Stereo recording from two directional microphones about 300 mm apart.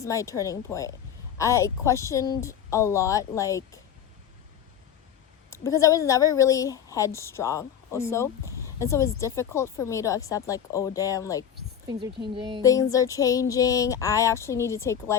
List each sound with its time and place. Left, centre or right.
0.0 s speech: centre
5.5 s speech: centre
11.9 s a woman's voice: centre
12.6 s speech: centre